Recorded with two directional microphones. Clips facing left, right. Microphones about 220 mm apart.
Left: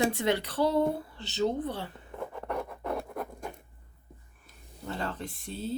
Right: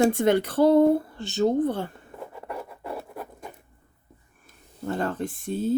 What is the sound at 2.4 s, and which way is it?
Scratch, 5° right (ahead or behind).